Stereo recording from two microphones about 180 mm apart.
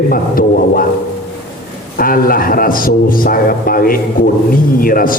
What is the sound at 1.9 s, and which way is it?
A man's voice, 55° left (ahead or behind).